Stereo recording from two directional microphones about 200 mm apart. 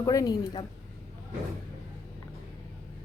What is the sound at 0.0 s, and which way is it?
Speech, 15° left (ahead or behind).